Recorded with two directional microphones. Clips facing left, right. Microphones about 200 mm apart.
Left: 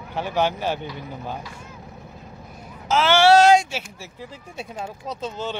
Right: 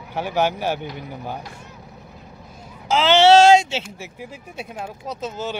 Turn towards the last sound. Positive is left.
turn(degrees=-5)  # may be behind; listen again after turning